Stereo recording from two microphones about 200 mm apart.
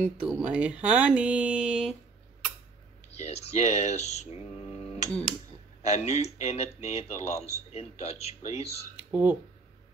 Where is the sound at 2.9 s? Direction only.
30° left (ahead or behind).